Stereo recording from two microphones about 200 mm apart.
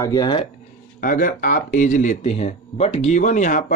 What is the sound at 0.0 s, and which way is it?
Speech, 20° left (ahead or behind).